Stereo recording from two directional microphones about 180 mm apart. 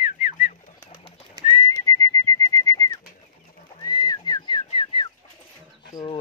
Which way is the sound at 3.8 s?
20° left (ahead or behind).